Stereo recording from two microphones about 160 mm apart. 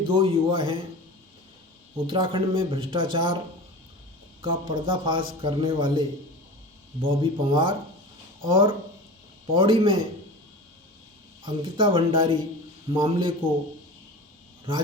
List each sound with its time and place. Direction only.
0.1 s speech: 35° right (ahead or behind)
2.0 s speech: 30° right (ahead or behind)
4.4 s speech: 30° right (ahead or behind)
11.4 s speech: 30° right (ahead or behind)